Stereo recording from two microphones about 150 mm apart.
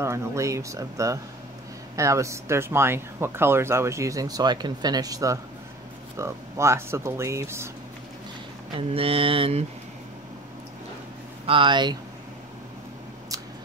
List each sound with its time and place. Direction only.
0.0 s speech: 20° right (ahead or behind)
8.7 s speech: 40° right (ahead or behind)
11.4 s speech: 35° right (ahead or behind)